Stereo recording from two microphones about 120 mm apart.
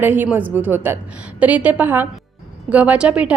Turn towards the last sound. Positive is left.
turn(degrees=-10)  # may be behind; listen again after turning